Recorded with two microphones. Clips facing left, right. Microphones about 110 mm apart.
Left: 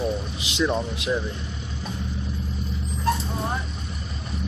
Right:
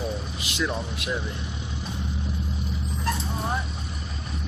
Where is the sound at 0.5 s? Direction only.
20° left (ahead or behind).